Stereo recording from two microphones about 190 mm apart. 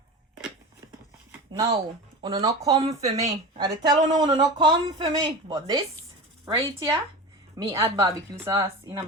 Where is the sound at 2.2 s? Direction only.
20° right (ahead or behind).